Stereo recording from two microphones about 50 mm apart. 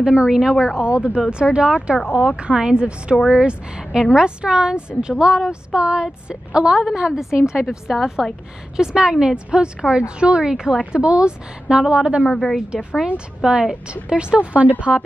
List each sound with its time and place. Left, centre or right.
0.0 s a woman's voice: centre
0.8 s a woman's voice: right; by 8.3 s centre
8.7 s a woman's voice: centre
12.3 s a woman's voice: left
12.5 s a woman's voice: centre